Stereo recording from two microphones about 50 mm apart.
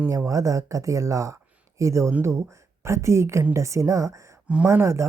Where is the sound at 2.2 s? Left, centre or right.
Right.